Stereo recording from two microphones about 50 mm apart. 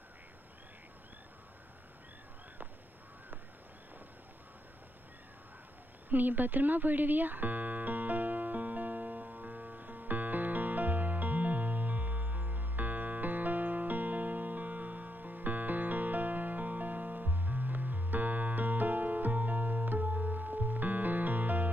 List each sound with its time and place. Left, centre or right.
6.0 s music: right